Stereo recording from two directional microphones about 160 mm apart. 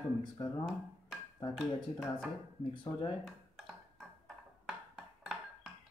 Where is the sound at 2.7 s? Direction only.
30° left (ahead or behind).